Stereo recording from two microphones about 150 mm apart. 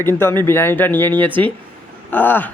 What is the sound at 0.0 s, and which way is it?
A man's voice, 15° left (ahead or behind).